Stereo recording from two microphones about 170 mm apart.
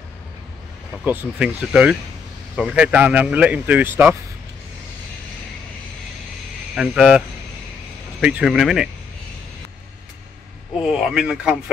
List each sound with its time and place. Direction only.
1.0 s speech: 5° right (ahead or behind)
6.7 s speech: centre (ahead or behind)
10.8 s speech: 5° right (ahead or behind)